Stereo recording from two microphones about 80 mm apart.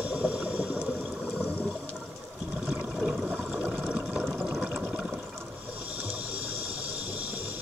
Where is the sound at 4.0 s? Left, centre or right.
Centre.